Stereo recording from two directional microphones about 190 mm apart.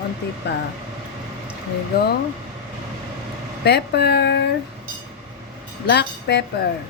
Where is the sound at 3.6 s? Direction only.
60° left (ahead or behind).